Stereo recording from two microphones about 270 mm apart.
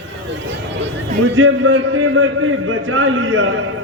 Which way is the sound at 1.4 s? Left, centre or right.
Right.